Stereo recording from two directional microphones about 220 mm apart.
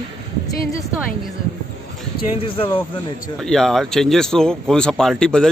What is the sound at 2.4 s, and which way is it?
Speech, 25° left (ahead or behind).